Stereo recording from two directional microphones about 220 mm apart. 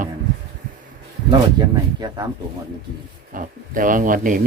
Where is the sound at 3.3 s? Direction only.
40° right (ahead or behind).